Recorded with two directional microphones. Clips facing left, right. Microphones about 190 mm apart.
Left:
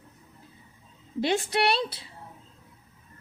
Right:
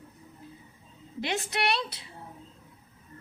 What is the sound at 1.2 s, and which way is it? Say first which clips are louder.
Speech: left 6 dB; 30° left (ahead or behind).